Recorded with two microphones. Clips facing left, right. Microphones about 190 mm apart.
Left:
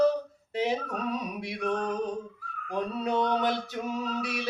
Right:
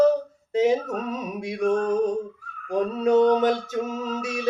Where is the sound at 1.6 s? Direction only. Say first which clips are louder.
Right 8 dB; 45° right (ahead or behind).